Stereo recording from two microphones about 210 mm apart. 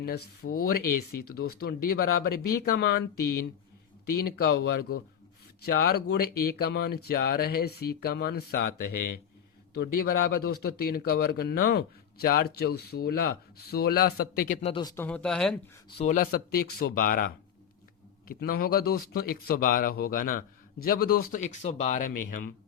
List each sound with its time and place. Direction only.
0.4 s speech: 60° left (ahead or behind)
1.6 s speech: 45° left (ahead or behind)
14.7 s speech: 20° left (ahead or behind)
15.0 s speech: 5° left (ahead or behind)
16.0 s speech: 35° left (ahead or behind)